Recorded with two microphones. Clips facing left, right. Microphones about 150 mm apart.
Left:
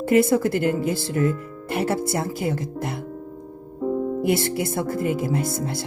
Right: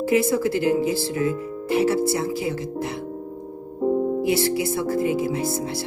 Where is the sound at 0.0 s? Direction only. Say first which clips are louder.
Left 2 dB; 55° left (ahead or behind).